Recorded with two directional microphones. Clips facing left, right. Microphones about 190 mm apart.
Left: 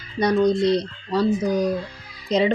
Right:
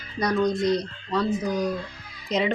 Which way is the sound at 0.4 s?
30° left (ahead or behind).